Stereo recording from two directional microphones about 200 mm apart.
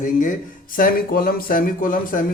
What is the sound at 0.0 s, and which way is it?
Speech, 40° left (ahead or behind).